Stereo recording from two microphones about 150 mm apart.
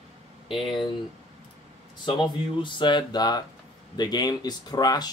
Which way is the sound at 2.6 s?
30° left (ahead or behind).